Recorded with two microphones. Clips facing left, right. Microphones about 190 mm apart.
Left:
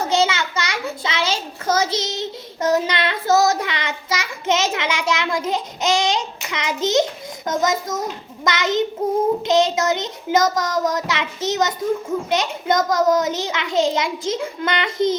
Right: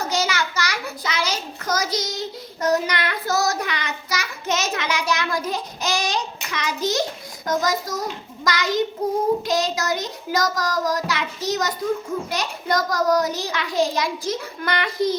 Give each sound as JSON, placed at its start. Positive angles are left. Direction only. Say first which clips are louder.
{"t": 0.0, "sound": "a child's voice", "louder": "left 4 dB", "side_deg": 25}